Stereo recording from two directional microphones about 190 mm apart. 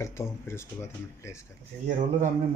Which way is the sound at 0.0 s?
15° left (ahead or behind).